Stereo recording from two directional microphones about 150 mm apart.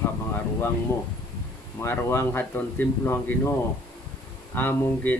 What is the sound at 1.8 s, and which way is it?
Speech, 15° left (ahead or behind).